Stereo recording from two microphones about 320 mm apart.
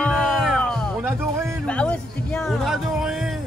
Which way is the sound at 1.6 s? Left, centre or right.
Centre.